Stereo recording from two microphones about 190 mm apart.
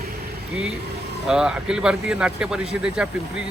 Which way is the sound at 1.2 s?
5° right (ahead or behind).